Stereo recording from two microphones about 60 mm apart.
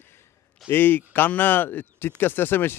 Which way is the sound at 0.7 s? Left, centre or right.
Left.